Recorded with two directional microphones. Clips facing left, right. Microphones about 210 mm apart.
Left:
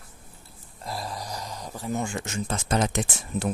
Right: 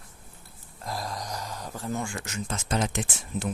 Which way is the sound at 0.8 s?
Centre (ahead or behind).